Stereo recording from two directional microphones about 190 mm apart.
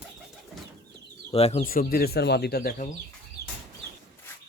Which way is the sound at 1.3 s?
35° left (ahead or behind).